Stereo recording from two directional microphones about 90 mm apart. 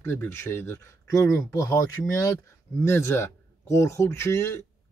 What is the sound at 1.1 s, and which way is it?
Speech, 40° left (ahead or behind).